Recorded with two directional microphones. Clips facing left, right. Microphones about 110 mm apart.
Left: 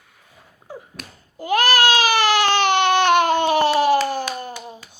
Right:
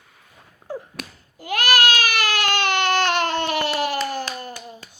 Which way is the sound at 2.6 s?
20° left (ahead or behind).